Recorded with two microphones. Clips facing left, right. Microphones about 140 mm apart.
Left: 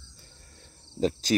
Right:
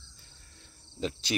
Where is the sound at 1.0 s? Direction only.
40° left (ahead or behind).